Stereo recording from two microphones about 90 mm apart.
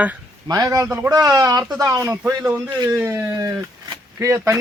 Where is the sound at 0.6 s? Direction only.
40° right (ahead or behind).